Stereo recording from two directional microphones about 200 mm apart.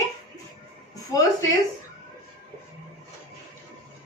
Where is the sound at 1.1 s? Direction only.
15° left (ahead or behind).